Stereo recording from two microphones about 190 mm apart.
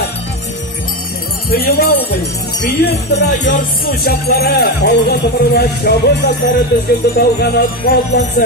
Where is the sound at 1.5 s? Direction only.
55° left (ahead or behind).